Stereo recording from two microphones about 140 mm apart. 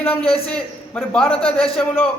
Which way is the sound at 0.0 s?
45° left (ahead or behind).